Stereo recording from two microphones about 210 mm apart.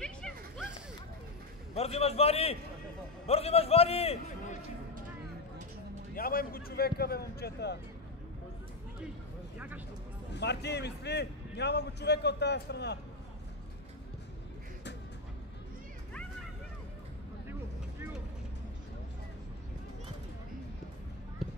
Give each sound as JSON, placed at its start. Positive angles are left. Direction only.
{"t": 0.0, "sound": "a sound", "side_deg": 5}
{"t": 1.7, "sound": "a man's voice", "side_deg": 30}
{"t": 6.1, "sound": "a man's voice", "side_deg": 45}
{"t": 10.3, "sound": "a man's voice", "side_deg": 55}